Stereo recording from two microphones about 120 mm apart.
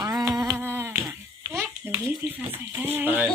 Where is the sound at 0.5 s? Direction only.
15° right (ahead or behind).